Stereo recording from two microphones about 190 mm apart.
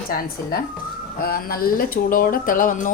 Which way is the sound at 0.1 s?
50° left (ahead or behind).